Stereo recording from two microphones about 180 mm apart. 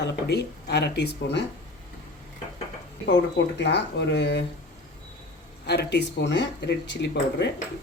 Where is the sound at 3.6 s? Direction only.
75° left (ahead or behind).